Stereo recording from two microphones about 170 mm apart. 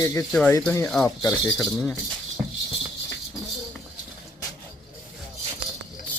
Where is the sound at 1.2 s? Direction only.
15° left (ahead or behind).